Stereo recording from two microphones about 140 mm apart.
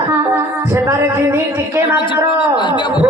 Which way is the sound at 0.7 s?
20° right (ahead or behind).